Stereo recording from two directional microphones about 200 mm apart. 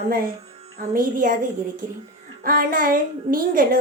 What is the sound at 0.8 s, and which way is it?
Speech, 45° right (ahead or behind).